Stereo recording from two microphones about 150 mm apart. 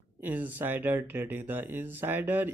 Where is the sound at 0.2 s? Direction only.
10° right (ahead or behind).